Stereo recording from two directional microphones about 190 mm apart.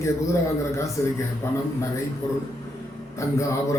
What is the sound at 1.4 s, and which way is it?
Speech, 15° left (ahead or behind).